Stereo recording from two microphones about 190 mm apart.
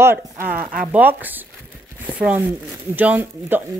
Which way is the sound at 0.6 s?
45° right (ahead or behind).